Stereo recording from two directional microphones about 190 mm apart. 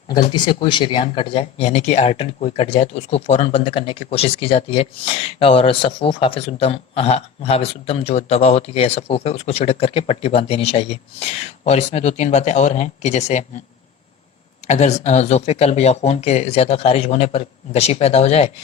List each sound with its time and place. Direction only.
0.2 s speech: 25° left (ahead or behind)
14.7 s speech: 35° left (ahead or behind)